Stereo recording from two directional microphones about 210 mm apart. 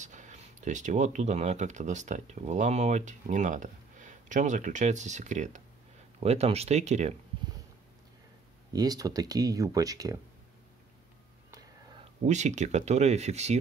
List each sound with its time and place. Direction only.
0.0 s speech: 35° right (ahead or behind)
8.7 s speech: 20° right (ahead or behind)
11.5 s speech: 30° right (ahead or behind)